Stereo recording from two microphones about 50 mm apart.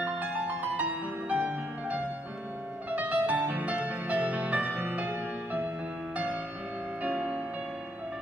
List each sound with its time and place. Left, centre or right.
0.0 s music: right
7.0 s music: right